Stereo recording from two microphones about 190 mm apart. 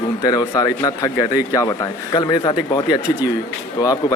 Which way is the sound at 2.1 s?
20° left (ahead or behind).